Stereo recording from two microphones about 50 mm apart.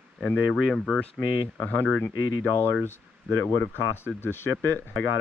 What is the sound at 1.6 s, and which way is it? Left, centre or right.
Speech, left.